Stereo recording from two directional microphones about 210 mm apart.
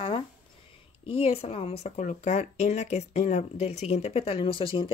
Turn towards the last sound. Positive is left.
turn(degrees=25)  # may be behind; listen again after turning